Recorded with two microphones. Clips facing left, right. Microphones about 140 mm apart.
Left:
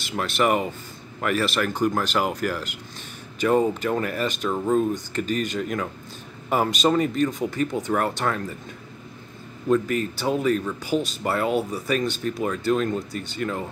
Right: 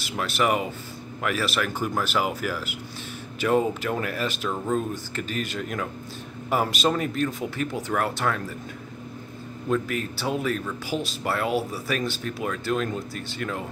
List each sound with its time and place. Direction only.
0.2 s speech: centre (ahead or behind)
9.7 s speech: centre (ahead or behind)